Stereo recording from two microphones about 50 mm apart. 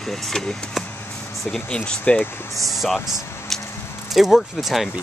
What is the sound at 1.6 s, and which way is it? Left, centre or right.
Speech, centre.